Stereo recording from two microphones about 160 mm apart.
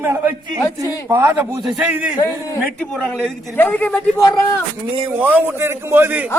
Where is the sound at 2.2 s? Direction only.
20° left (ahead or behind).